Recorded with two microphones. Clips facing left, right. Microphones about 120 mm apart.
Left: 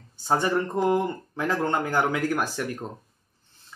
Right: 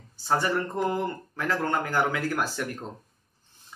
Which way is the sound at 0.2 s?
20° left (ahead or behind).